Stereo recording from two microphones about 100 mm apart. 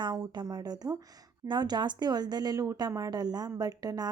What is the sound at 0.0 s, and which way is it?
Speech, 45° right (ahead or behind).